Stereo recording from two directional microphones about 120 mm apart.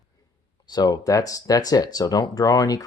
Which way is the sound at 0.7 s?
35° left (ahead or behind).